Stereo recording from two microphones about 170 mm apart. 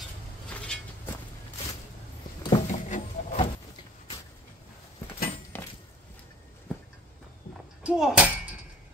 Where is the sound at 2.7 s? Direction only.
45° left (ahead or behind).